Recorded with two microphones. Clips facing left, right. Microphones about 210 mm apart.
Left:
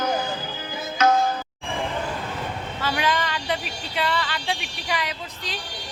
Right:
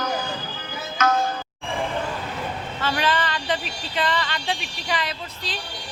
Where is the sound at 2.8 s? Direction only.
10° left (ahead or behind).